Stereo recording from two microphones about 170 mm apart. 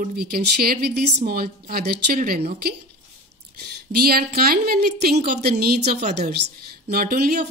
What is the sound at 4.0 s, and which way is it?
A woman's voice, 65° right (ahead or behind).